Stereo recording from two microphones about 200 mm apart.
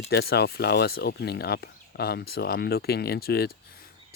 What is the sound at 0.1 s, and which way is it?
Speech, 55° left (ahead or behind).